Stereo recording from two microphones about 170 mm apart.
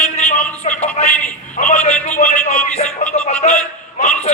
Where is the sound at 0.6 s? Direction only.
40° left (ahead or behind).